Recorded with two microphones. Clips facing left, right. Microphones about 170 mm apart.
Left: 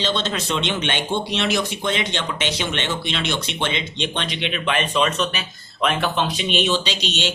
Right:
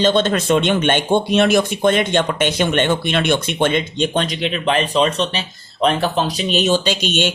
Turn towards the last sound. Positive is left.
turn(degrees=-50)  # may be behind; listen again after turning